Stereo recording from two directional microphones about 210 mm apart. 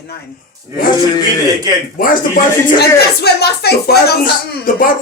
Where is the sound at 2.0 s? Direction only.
45° left (ahead or behind).